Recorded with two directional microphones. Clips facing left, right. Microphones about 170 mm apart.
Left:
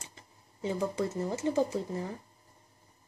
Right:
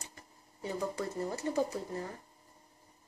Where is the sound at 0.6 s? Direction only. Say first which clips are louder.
Left 4 dB; 20° left (ahead or behind).